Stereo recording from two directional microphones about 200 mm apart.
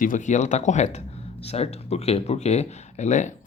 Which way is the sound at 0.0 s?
40° left (ahead or behind).